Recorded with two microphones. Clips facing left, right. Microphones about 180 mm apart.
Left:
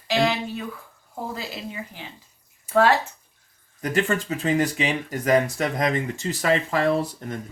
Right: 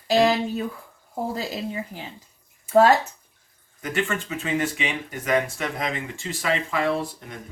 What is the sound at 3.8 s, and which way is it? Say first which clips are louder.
Speech: left 3 dB; 35° left (ahead or behind).